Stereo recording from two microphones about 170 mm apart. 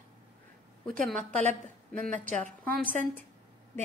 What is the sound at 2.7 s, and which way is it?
Speech, 50° right (ahead or behind).